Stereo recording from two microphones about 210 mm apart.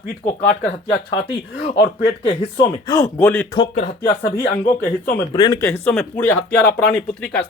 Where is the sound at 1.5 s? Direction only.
50° left (ahead or behind).